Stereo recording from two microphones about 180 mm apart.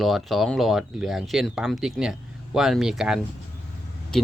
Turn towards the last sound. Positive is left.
turn(degrees=5)  # may be behind; listen again after turning